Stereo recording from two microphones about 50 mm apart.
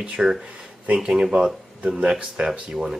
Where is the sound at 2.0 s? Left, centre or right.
Right.